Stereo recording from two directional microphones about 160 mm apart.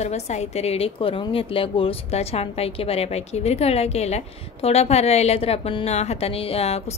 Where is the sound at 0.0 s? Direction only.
45° left (ahead or behind).